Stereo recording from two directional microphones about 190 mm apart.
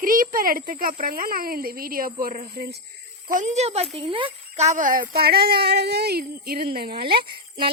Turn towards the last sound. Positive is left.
turn(degrees=-55)  # may be behind; listen again after turning